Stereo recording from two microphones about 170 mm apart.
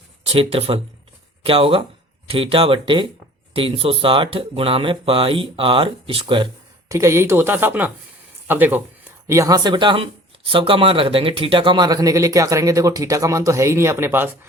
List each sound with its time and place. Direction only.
0.3 s speech: 35° right (ahead or behind)
6.9 s speech: 15° right (ahead or behind)